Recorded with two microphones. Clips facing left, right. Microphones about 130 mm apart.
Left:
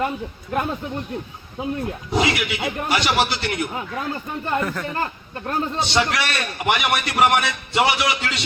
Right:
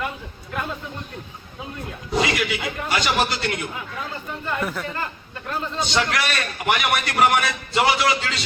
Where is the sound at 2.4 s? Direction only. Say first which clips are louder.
Left 1 dB; 25° left (ahead or behind).